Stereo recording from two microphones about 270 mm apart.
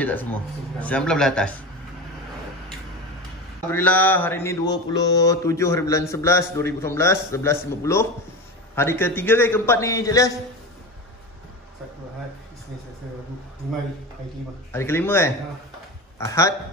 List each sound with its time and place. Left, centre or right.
0.0 s speech: centre
3.7 s mantra: centre
14.7 s mantra: centre